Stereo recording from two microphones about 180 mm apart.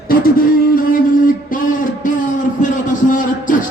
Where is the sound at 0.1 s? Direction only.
55° left (ahead or behind).